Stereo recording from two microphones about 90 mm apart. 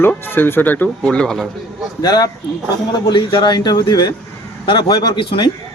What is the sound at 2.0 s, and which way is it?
A man's voice, 50° left (ahead or behind).